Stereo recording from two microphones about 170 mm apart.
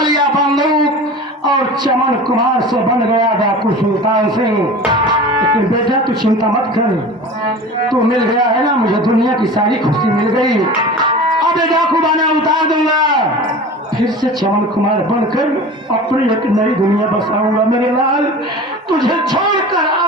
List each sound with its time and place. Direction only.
0.0 s a sound: 25° right (ahead or behind)
1.5 s music: 25° right (ahead or behind)
4.9 s music: 25° right (ahead or behind)
5.9 s a man's voice: 25° right (ahead or behind)
9.0 s a man's voice: 25° right (ahead or behind)
10.3 s music: 25° right (ahead or behind)
11.7 s a man's voice: 25° right (ahead or behind)
18.9 s speech: 25° right (ahead or behind)